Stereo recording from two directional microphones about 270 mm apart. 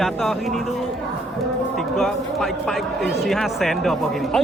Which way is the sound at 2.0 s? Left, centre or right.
Centre.